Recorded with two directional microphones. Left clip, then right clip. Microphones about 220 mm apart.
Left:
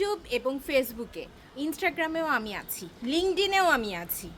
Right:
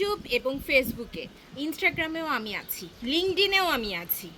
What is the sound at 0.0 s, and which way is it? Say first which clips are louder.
A woman's voice: right 1 dB; 10° left (ahead or behind).